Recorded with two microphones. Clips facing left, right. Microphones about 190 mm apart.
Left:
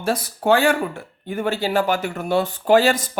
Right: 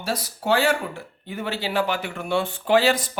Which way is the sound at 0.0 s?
50° left (ahead or behind).